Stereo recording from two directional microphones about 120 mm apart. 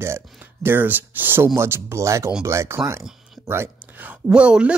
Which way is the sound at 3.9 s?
15° right (ahead or behind).